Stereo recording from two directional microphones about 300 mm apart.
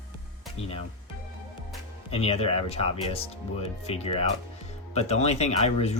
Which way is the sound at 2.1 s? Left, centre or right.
Centre.